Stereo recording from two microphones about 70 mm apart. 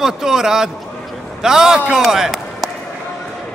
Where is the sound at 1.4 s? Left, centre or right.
Centre.